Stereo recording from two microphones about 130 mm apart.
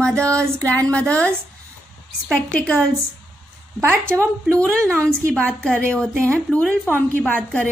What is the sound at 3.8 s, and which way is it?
Speech, 15° right (ahead or behind).